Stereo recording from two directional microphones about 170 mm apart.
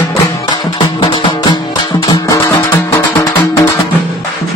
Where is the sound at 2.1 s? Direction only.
15° left (ahead or behind).